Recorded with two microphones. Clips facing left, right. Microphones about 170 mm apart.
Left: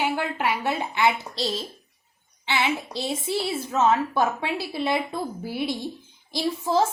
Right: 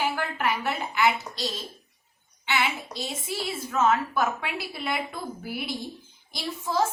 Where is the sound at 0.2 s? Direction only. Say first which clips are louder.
Left 2 dB; 25° left (ahead or behind).